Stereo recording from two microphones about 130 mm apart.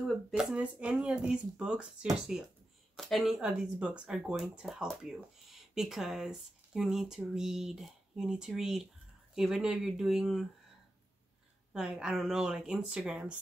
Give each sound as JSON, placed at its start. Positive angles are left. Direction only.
{"t": 0.0, "sound": "speech", "side_deg": 0}
{"t": 11.7, "sound": "speech", "side_deg": -5}